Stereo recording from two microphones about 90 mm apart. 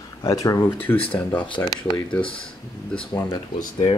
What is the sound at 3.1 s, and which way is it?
Speech, 50° left (ahead or behind).